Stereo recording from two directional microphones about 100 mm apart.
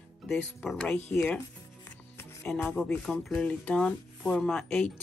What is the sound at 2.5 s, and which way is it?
Speech, 5° left (ahead or behind).